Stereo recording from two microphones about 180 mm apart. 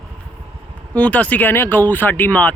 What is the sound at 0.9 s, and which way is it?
Speech, 10° left (ahead or behind).